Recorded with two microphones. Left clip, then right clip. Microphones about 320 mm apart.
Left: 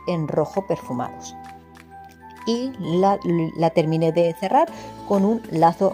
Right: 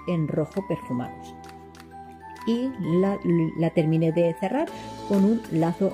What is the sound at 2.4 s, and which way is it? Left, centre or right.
Speech, left.